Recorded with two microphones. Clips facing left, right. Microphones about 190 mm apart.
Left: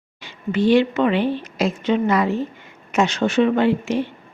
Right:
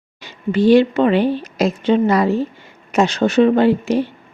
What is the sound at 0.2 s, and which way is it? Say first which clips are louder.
Speech: right 4 dB; 40° right (ahead or behind).